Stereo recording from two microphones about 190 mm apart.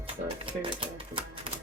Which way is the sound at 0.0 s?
30° right (ahead or behind).